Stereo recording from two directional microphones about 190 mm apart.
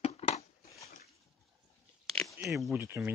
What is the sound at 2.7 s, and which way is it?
Speech, 15° right (ahead or behind).